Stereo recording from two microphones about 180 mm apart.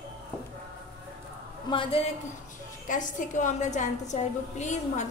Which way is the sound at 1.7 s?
30° left (ahead or behind).